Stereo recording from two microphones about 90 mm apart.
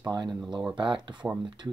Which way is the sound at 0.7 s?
60° right (ahead or behind).